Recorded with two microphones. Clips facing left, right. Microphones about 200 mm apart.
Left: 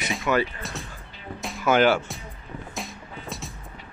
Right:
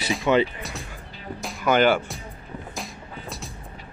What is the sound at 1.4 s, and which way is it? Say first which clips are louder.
Music: even; centre (ahead or behind).